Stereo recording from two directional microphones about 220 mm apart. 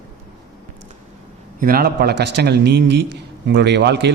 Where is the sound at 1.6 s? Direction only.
45° right (ahead or behind).